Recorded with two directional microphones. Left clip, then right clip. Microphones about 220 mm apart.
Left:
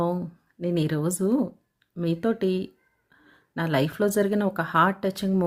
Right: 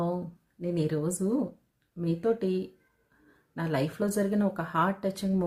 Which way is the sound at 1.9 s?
40° left (ahead or behind).